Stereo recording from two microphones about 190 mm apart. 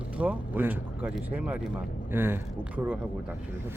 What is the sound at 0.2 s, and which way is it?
Speech, 10° right (ahead or behind).